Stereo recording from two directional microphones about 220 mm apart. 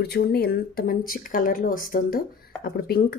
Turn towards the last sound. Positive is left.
turn(degrees=45)  # may be behind; listen again after turning